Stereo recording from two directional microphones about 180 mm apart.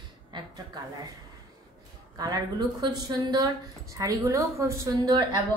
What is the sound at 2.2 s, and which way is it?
A woman's voice, 20° right (ahead or behind).